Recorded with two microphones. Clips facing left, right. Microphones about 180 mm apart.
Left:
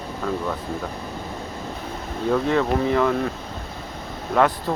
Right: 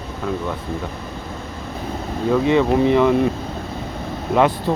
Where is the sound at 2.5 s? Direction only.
15° right (ahead or behind).